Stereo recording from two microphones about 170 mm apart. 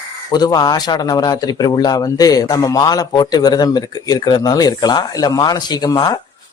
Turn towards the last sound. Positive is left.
turn(degrees=25)  # may be behind; listen again after turning